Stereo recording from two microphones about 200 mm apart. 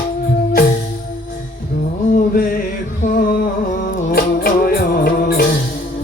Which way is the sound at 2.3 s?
45° left (ahead or behind).